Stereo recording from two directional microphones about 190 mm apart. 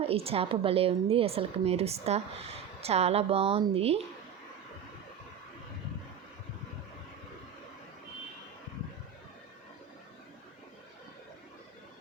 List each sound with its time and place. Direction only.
0.0 s a woman's voice: 30° right (ahead or behind)